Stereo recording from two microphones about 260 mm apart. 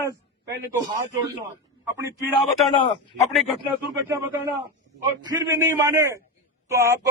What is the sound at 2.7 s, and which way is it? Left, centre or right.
Speech, centre.